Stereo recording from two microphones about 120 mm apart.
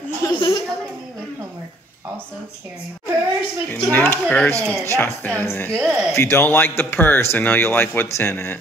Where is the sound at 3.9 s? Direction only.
15° left (ahead or behind).